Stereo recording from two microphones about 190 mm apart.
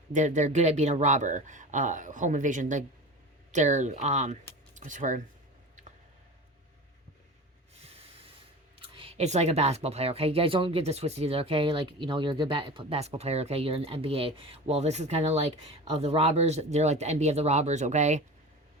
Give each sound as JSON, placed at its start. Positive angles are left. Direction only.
{"t": 0.1, "sound": "speech", "side_deg": -40}
{"t": 8.8, "sound": "speech", "side_deg": -30}